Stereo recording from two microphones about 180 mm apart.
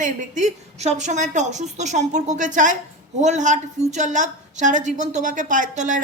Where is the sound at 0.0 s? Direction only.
40° right (ahead or behind).